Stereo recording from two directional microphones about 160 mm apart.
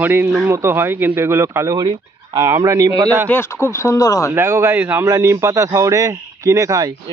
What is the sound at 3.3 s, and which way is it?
Speech, 15° left (ahead or behind).